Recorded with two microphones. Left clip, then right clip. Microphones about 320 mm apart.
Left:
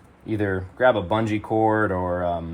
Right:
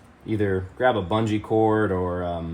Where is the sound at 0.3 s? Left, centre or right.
Centre.